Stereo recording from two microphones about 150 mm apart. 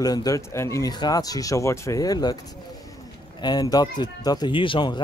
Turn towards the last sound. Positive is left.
turn(degrees=30)  # may be behind; listen again after turning